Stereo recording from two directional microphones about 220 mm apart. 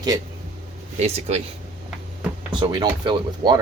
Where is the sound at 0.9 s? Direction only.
30° right (ahead or behind).